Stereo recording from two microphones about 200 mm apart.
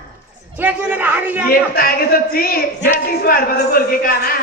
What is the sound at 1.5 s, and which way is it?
A woman's voice, 50° left (ahead or behind).